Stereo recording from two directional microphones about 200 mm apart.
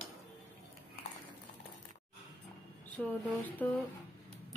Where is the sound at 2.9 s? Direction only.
10° left (ahead or behind).